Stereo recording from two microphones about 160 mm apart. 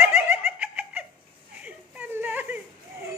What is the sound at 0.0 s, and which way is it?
Giggle, 15° right (ahead or behind).